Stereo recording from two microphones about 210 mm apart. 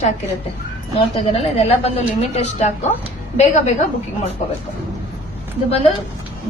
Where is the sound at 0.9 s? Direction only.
30° left (ahead or behind).